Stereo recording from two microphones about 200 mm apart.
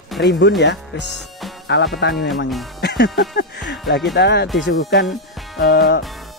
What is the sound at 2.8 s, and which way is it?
Music, 55° left (ahead or behind).